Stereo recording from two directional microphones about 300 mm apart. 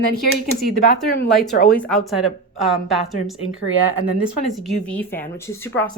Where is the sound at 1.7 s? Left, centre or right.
Centre.